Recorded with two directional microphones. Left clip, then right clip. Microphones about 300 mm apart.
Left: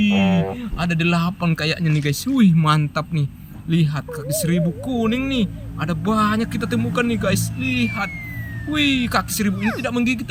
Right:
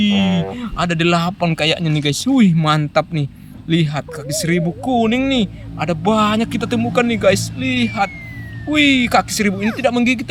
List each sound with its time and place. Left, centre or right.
0.0 s speech: centre